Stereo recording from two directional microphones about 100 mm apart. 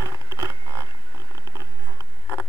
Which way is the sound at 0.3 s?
30° right (ahead or behind).